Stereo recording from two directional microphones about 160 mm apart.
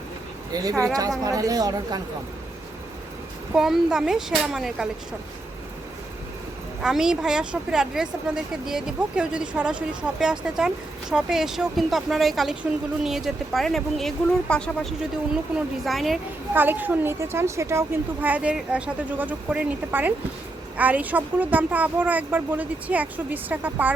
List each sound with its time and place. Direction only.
0.5 s a woman's voice: 20° right (ahead or behind)
3.5 s speech: 5° right (ahead or behind)
6.8 s speech: 5° right (ahead or behind)
16.6 s a woman's voice: 10° right (ahead or behind)